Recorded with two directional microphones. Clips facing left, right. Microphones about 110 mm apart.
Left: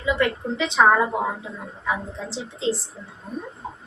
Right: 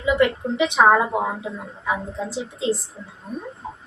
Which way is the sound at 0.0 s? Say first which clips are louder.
Right 3 dB; 15° right (ahead or behind).